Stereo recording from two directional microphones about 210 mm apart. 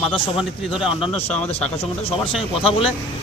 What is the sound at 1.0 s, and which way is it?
Speech, 30° left (ahead or behind).